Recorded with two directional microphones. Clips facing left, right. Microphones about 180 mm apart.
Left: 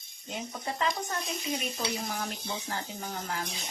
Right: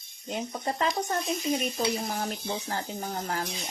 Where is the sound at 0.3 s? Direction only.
45° right (ahead or behind).